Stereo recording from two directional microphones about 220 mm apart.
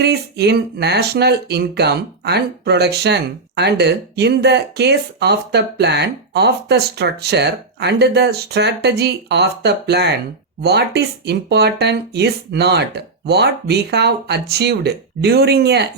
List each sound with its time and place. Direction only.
0.0 s speech: 50° right (ahead or behind)